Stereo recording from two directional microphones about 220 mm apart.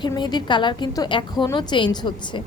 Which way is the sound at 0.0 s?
20° left (ahead or behind).